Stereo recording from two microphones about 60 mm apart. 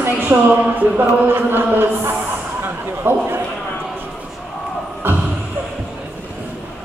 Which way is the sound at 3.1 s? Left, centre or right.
Right.